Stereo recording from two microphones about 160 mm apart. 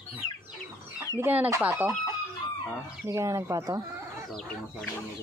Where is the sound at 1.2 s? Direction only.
10° right (ahead or behind).